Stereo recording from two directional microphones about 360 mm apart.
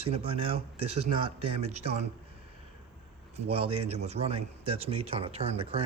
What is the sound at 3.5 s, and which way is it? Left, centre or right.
A man's voice, centre.